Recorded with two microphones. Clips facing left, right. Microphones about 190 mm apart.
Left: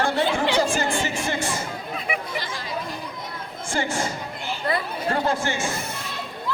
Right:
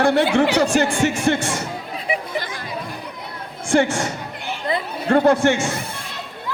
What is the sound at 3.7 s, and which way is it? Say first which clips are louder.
Speech: right 8 dB; 70° right (ahead or behind).